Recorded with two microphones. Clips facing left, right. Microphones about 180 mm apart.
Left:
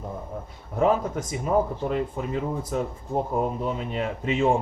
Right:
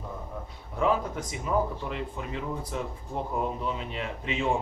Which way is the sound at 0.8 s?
45° left (ahead or behind).